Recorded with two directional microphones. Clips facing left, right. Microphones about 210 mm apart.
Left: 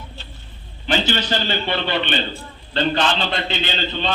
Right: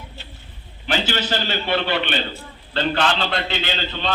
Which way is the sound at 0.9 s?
10° right (ahead or behind).